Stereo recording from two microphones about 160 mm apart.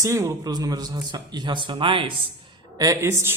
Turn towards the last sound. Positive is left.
turn(degrees=-15)  # may be behind; listen again after turning